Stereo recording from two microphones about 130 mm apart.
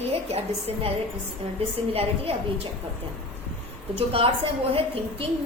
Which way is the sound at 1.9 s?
50° right (ahead or behind).